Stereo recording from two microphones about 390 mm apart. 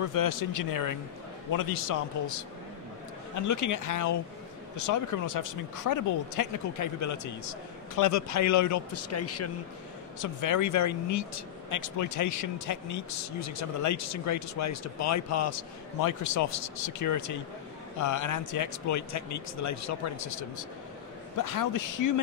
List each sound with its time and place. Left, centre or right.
0.1 s speech: left
10.2 s speech: left